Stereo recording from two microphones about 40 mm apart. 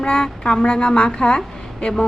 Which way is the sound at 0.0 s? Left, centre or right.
Left.